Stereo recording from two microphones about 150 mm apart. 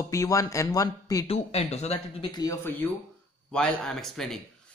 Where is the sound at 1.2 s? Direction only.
45° left (ahead or behind).